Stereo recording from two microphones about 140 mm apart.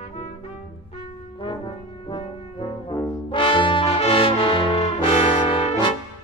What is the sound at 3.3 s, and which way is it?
Brass instrument, 35° left (ahead or behind).